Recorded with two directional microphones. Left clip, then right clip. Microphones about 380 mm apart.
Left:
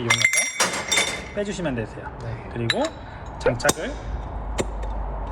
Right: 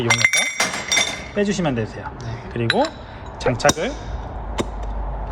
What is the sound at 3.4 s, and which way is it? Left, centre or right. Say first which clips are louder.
Speech: right 4 dB; centre.